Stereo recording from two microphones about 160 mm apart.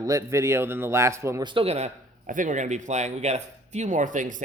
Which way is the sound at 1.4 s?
35° right (ahead or behind).